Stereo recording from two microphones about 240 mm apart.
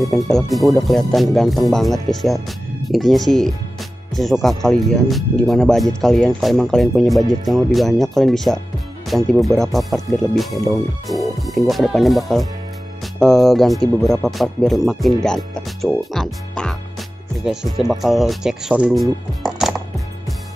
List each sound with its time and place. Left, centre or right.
0.0 s speech: centre